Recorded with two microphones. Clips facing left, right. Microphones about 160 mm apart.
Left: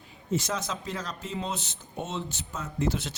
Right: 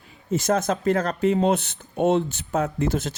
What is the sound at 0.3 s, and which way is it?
Speech, 50° right (ahead or behind).